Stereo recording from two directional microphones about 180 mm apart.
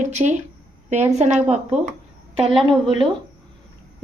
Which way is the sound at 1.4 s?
35° right (ahead or behind).